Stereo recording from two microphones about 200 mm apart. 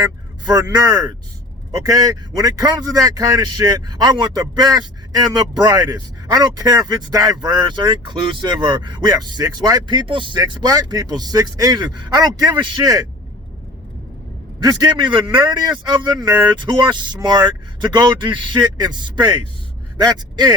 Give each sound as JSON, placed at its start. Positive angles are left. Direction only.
{"t": 0.0, "sound": "speech", "side_deg": -20}
{"t": 14.6, "sound": "speech", "side_deg": -20}